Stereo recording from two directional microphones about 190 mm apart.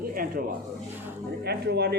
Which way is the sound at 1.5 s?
60° right (ahead or behind).